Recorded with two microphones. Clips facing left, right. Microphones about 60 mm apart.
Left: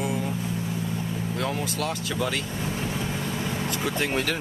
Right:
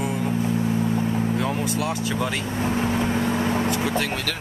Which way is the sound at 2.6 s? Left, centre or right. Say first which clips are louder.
Right 7 dB; right.